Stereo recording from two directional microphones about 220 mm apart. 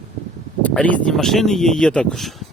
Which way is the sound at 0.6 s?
5° left (ahead or behind).